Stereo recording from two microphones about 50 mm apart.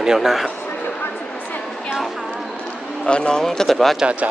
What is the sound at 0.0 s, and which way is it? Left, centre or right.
Speech, centre.